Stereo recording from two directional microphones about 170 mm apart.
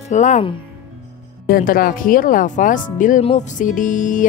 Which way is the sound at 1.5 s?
55° left (ahead or behind).